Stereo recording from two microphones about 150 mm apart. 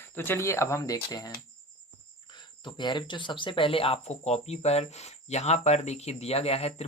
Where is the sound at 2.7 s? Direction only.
30° left (ahead or behind).